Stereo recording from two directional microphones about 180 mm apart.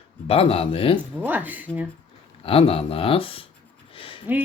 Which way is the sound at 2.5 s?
30° left (ahead or behind).